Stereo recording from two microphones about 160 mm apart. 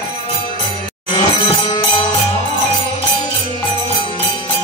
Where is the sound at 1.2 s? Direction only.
30° left (ahead or behind).